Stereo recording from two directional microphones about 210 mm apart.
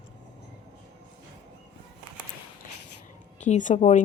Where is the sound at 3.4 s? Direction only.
35° left (ahead or behind).